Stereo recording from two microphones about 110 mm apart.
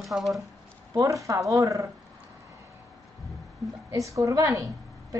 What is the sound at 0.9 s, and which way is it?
Speech, 30° right (ahead or behind).